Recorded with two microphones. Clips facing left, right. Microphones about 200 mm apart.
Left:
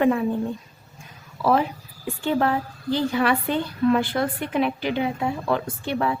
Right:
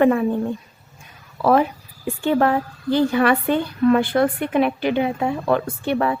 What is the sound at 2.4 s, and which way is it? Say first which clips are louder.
A woman's voice: right 4 dB; 60° right (ahead or behind).